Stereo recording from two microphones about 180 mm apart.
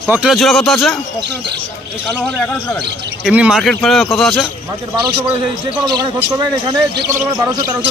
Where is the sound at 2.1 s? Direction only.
5° left (ahead or behind).